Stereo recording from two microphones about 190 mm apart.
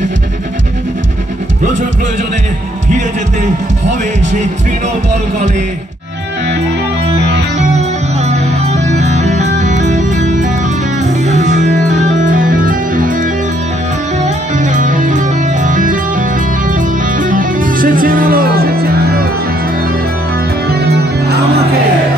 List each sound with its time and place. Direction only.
8.3 s music: 35° right (ahead or behind); by 19.2 s 55° right (ahead or behind)
20.6 s music: 60° right (ahead or behind)